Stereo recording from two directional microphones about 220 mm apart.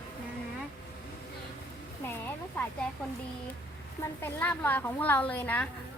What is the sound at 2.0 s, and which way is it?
Speech, 10° left (ahead or behind).